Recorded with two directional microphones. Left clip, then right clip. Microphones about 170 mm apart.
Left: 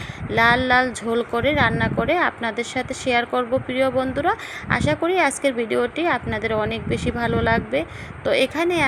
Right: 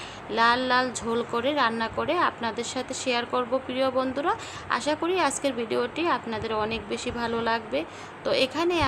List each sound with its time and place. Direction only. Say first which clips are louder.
0.3 s a woman's voice: left 5 dB; 25° left (ahead or behind)